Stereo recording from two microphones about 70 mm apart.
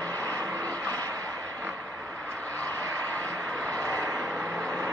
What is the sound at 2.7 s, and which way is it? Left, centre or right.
Vehicle, right.